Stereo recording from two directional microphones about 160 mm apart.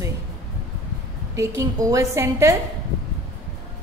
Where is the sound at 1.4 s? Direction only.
20° right (ahead or behind).